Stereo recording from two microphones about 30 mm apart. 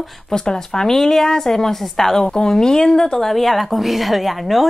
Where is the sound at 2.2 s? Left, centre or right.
Left.